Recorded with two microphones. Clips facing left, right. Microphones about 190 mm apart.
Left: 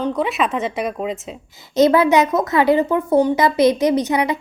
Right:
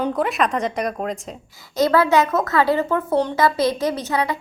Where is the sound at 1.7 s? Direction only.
20° left (ahead or behind).